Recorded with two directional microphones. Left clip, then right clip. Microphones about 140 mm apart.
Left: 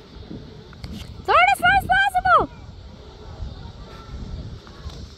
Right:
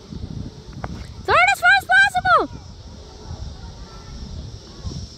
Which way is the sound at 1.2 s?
20° right (ahead or behind).